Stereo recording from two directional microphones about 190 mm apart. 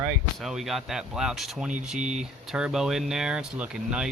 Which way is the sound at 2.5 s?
5° right (ahead or behind).